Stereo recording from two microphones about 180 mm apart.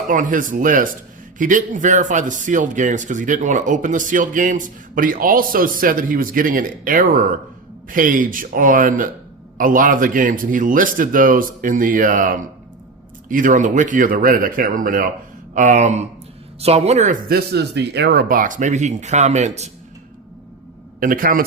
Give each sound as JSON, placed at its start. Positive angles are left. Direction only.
{"t": 0.1, "sound": "speech", "side_deg": -50}
{"t": 17.2, "sound": "speech", "side_deg": -60}
{"t": 21.0, "sound": "speech", "side_deg": -50}